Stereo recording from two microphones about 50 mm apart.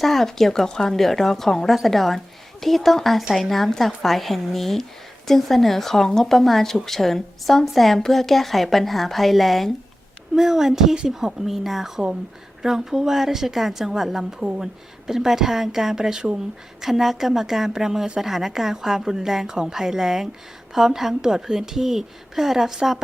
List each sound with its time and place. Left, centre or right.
0.0 s a woman's voice: centre
10.3 s a woman's voice: centre